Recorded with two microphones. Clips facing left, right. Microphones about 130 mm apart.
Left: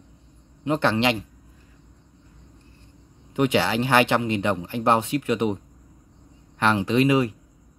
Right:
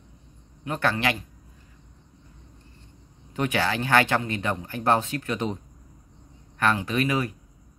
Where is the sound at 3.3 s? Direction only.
20° left (ahead or behind).